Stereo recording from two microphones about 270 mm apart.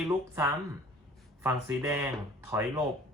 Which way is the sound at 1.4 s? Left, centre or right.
Centre.